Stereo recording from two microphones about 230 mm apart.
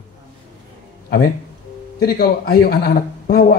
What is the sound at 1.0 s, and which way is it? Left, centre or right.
A man's voice, left.